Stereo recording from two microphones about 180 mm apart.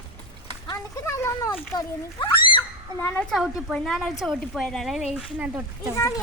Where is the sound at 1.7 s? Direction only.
25° left (ahead or behind).